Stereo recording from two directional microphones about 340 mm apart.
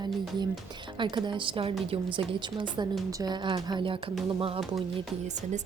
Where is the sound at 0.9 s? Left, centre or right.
Centre.